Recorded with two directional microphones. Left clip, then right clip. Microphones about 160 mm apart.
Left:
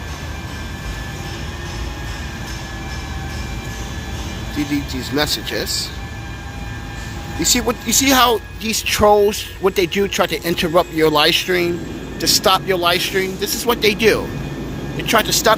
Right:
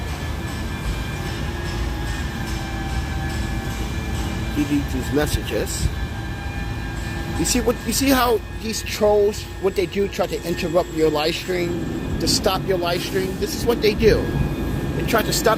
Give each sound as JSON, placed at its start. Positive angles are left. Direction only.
{"t": 5.1, "sound": "speech", "side_deg": 20}
{"t": 7.4, "sound": "speech", "side_deg": 15}
{"t": 8.6, "sound": "speech", "side_deg": 45}
{"t": 12.2, "sound": "speech", "side_deg": 40}